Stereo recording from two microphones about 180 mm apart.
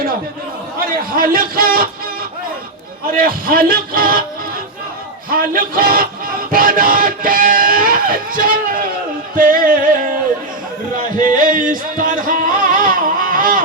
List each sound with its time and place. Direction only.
0.9 s a man's voice: 55° right (ahead or behind)
3.2 s a man's voice: 50° right (ahead or behind)
5.3 s a man's voice: 50° right (ahead or behind)
9.3 s music: 50° right (ahead or behind)
11.2 s a sound: 50° right (ahead or behind)